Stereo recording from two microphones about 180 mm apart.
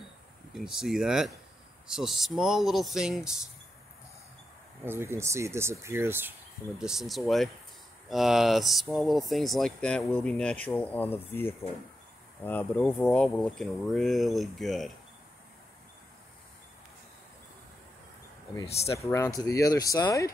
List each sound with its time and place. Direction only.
0.6 s speech: centre (ahead or behind)
4.8 s speech: 15° right (ahead or behind)
6.8 s speech: centre (ahead or behind)
18.7 s speech: 35° left (ahead or behind)
18.9 s speech: 15° left (ahead or behind)